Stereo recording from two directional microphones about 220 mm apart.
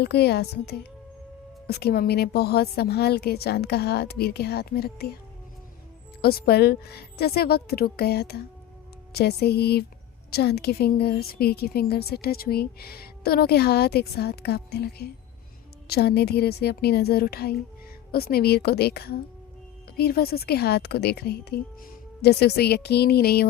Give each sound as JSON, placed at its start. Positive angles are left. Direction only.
{"t": 0.0, "sound": "a woman's voice", "side_deg": 50}
{"t": 6.2, "sound": "a woman's voice", "side_deg": 45}